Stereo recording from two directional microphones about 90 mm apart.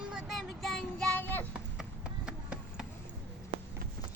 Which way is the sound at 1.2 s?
20° left (ahead or behind).